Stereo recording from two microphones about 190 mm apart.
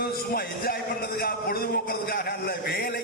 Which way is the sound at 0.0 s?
50° left (ahead or behind).